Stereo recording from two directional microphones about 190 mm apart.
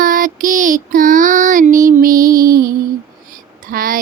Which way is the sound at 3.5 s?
45° right (ahead or behind).